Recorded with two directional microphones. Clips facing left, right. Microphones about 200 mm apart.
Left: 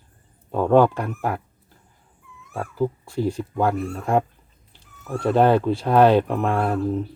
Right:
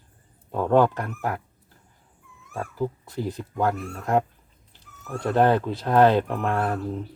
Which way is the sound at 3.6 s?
15° left (ahead or behind).